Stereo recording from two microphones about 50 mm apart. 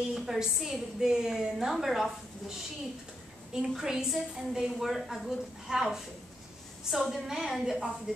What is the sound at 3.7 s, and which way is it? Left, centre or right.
A woman's voice, centre.